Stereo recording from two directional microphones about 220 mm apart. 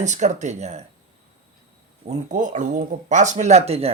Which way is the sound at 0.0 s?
30° right (ahead or behind).